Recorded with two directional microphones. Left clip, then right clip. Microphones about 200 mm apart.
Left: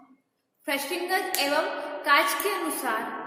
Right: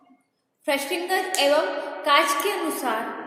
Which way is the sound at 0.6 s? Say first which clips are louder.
Right 4 dB; 15° right (ahead or behind).